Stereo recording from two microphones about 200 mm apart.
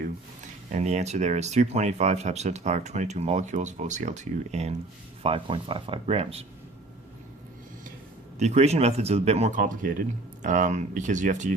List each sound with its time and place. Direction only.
0.0 s speech: 35° right (ahead or behind)
8.4 s speech: 35° right (ahead or behind)